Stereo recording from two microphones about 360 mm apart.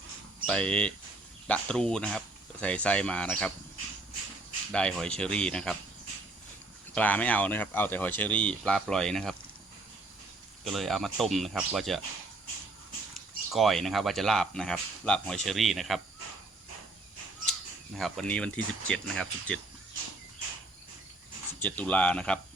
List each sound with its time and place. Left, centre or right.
0.4 s speech: centre
4.7 s speech: centre
6.9 s speech: centre
10.6 s speech: centre
13.5 s speech: centre
17.9 s speech: centre
21.6 s speech: centre